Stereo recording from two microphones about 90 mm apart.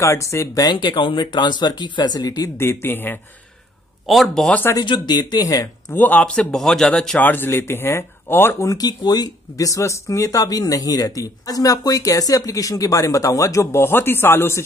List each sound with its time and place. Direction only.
0.0 s speech: 35° left (ahead or behind)
0.7 s speech: 65° left (ahead or behind); by 2.5 s 40° left (ahead or behind)
2.5 s speech: 25° left (ahead or behind)
4.0 s a man's voice: centre (ahead or behind)
4.8 s speech: 60° left (ahead or behind); by 5.9 s 40° left (ahead or behind)
5.9 s a man's voice: 15° left (ahead or behind)
7.2 s speech: 25° left (ahead or behind)
8.6 s speech: 45° left (ahead or behind); by 14.6 s 25° left (ahead or behind)